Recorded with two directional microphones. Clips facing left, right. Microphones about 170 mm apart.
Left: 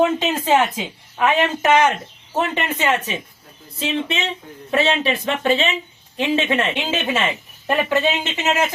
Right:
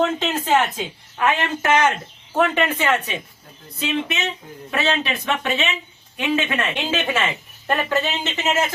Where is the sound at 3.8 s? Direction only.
30° left (ahead or behind).